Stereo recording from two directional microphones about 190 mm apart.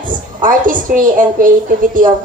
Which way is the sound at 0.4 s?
45° right (ahead or behind).